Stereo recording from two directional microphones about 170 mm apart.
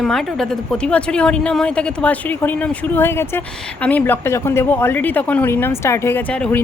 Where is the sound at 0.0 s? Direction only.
Centre (ahead or behind).